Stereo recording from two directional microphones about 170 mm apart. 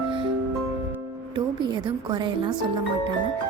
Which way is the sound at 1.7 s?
25° right (ahead or behind).